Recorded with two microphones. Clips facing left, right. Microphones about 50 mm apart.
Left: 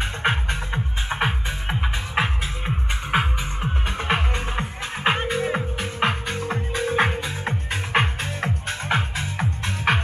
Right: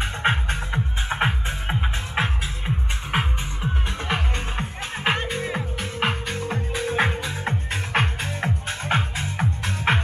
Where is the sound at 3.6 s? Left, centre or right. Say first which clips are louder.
Left 1 dB; left.